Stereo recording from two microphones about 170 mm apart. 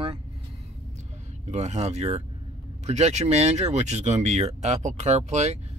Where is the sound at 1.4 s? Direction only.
40° right (ahead or behind).